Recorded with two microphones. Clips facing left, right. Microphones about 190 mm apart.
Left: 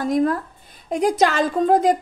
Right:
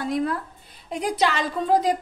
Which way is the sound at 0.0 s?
45° left (ahead or behind).